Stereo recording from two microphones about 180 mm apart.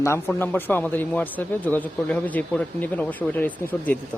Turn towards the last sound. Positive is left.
turn(degrees=10)  # may be behind; listen again after turning